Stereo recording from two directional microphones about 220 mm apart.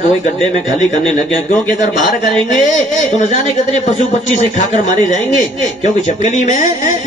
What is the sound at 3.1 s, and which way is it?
A man's voice, 35° left (ahead or behind).